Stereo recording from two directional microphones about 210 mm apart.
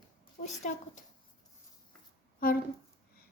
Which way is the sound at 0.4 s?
35° left (ahead or behind).